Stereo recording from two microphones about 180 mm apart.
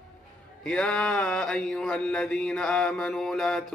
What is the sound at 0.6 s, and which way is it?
Mantra, 5° left (ahead or behind).